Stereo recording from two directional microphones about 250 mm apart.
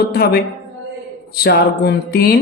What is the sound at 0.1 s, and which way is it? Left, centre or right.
Speech, left.